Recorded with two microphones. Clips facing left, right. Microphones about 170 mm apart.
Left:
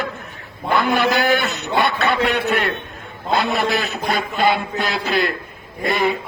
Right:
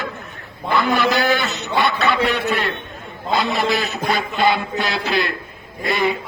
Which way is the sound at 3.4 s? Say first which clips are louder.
Even; 55° left (ahead or behind).